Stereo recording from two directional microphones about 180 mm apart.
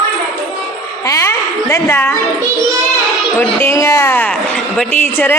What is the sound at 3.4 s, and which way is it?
A woman's voice, 10° left (ahead or behind).